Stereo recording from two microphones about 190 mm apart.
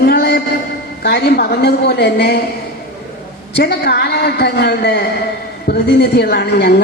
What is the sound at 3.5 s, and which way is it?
A woman's voice, 60° left (ahead or behind).